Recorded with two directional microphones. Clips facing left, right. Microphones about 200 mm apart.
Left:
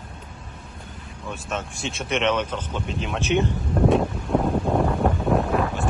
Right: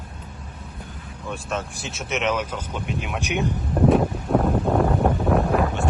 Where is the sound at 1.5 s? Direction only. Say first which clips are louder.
Left 1 dB; centre (ahead or behind).